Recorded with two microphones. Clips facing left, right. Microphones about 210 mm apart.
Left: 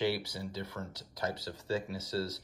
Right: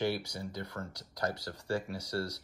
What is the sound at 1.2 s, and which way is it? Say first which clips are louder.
Speech: right 1 dB; 25° left (ahead or behind).